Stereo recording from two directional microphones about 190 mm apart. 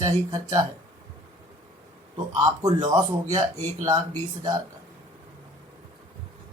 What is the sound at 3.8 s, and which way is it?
Speech, 20° right (ahead or behind).